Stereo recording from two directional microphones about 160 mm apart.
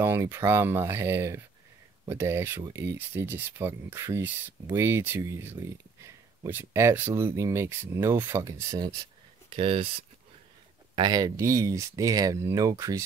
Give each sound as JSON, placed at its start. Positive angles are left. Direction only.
{"t": 0.0, "sound": "speech", "side_deg": -15}
{"t": 9.5, "sound": "speech", "side_deg": -35}
{"t": 11.0, "sound": "speech", "side_deg": -25}